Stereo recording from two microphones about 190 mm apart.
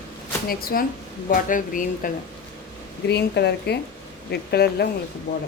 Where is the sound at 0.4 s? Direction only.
50° left (ahead or behind).